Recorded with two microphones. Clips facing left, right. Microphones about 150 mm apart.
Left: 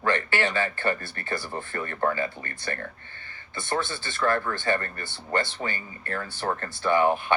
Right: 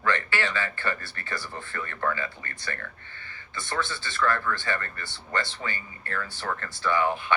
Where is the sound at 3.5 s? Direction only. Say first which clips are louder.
Left 2 dB; 50° left (ahead or behind).